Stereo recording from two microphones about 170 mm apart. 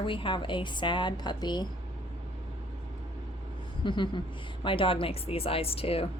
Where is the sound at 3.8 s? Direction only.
30° left (ahead or behind).